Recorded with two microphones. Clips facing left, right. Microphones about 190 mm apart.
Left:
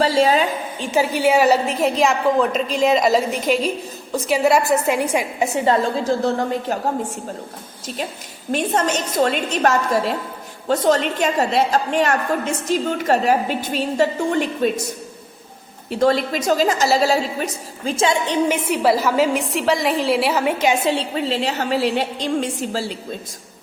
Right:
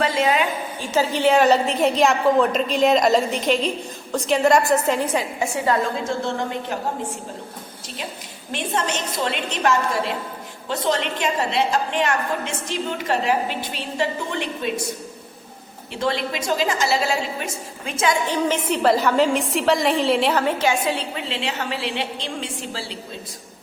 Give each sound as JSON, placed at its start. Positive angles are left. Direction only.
{"t": 0.0, "sound": "a woman's voice", "side_deg": 35}
{"t": 0.8, "sound": "a woman's voice", "side_deg": 10}
{"t": 5.6, "sound": "a woman's voice", "side_deg": 35}
{"t": 8.5, "sound": "a woman's voice", "side_deg": 40}
{"t": 15.9, "sound": "a woman's voice", "side_deg": 40}
{"t": 18.4, "sound": "a woman's voice", "side_deg": 10}
{"t": 20.9, "sound": "a woman's voice", "side_deg": 40}